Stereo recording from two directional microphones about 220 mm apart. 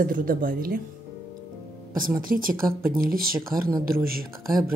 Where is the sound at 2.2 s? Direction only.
40° right (ahead or behind).